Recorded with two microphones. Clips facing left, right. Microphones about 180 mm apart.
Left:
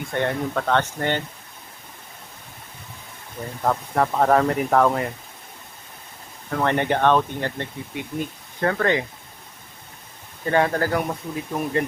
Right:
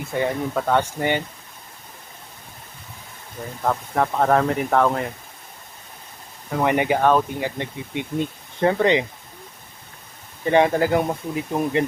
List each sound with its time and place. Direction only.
0.0 s speech: 5° right (ahead or behind)
3.6 s speech: centre (ahead or behind)
6.6 s speech: 10° right (ahead or behind)
7.9 s speech: 20° right (ahead or behind)
10.4 s speech: 20° right (ahead or behind)